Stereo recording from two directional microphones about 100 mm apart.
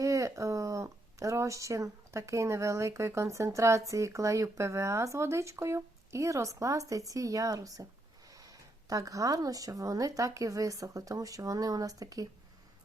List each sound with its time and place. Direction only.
0.0 s speech: 35° right (ahead or behind)